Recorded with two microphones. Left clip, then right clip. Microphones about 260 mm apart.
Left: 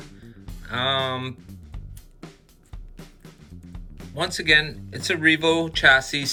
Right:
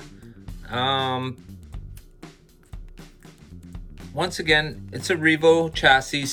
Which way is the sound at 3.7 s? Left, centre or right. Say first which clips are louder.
Even; centre.